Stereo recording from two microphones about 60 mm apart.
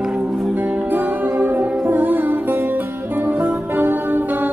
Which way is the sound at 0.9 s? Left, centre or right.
Right.